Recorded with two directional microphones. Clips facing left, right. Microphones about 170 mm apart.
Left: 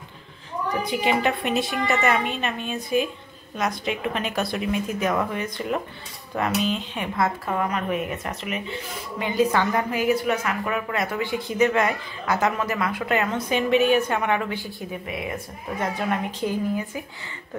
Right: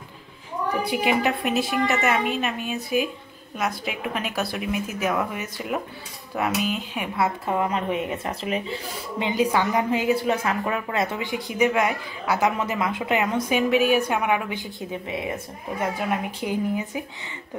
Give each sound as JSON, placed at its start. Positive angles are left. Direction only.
{"t": 0.8, "sound": "a woman's voice", "side_deg": -5}
{"t": 7.4, "sound": "speech", "side_deg": -25}
{"t": 9.2, "sound": "a woman's voice", "side_deg": -15}
{"t": 14.8, "sound": "speech", "side_deg": -25}
{"t": 15.8, "sound": "a woman's voice", "side_deg": -10}